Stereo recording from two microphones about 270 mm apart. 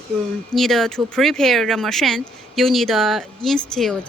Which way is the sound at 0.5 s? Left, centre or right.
Centre.